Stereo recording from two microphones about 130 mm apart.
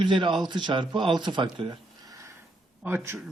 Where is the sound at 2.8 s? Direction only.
15° right (ahead or behind).